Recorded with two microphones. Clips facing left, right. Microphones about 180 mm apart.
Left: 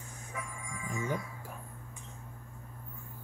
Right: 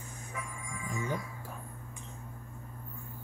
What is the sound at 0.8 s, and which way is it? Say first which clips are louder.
Speech: even; 25° left (ahead or behind).